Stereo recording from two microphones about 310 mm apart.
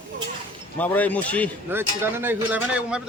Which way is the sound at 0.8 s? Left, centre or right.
Centre.